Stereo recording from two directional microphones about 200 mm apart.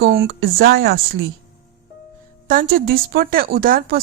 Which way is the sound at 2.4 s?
45° right (ahead or behind).